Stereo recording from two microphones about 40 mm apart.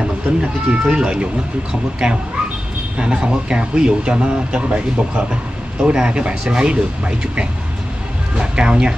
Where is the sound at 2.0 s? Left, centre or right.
Centre.